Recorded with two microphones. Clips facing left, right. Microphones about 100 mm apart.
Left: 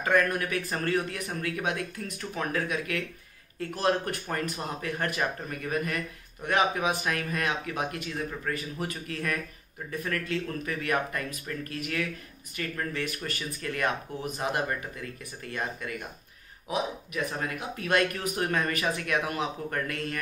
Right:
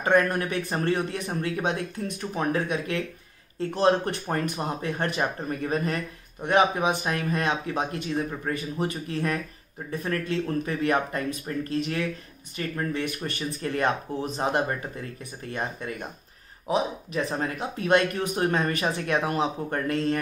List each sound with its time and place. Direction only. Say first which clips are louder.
0.0 s speech: right 3 dB; 30° right (ahead or behind)